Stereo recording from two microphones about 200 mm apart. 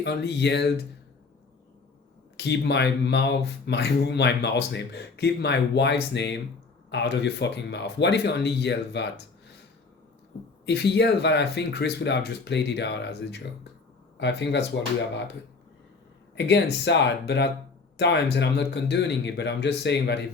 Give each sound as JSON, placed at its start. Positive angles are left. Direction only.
{"t": 0.0, "sound": "speech", "side_deg": 60}
{"t": 2.3, "sound": "speech", "side_deg": 60}
{"t": 10.7, "sound": "speech", "side_deg": 60}
{"t": 16.3, "sound": "speech", "side_deg": 60}